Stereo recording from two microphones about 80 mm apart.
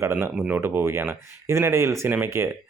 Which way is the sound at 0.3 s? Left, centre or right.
Centre.